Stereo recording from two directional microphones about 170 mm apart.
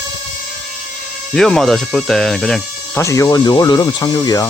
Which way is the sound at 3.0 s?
20° left (ahead or behind).